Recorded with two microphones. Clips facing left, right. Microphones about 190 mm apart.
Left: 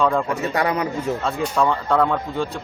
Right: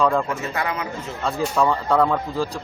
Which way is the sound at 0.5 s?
35° left (ahead or behind).